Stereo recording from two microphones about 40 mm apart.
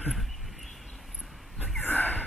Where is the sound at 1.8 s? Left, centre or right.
Left.